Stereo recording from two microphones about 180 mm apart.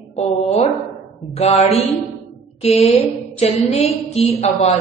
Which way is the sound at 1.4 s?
35° left (ahead or behind).